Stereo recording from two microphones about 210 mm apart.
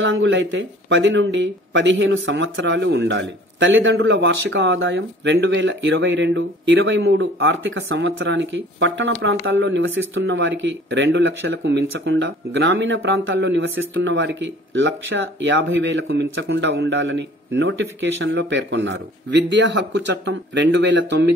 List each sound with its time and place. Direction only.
0.0 s speech: 70° right (ahead or behind)